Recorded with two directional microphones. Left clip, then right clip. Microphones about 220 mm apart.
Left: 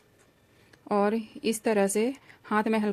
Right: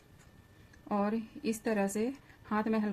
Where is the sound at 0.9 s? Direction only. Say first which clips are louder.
Left 8 dB; 45° left (ahead or behind).